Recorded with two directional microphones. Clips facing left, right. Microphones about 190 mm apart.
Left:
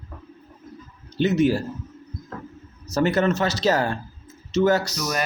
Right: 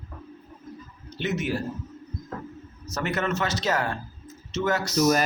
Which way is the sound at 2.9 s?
30° left (ahead or behind).